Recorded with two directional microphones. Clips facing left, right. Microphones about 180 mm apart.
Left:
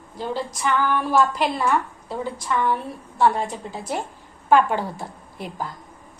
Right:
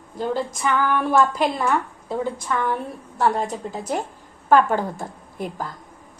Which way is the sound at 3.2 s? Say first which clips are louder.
Left 1 dB; 40° right (ahead or behind).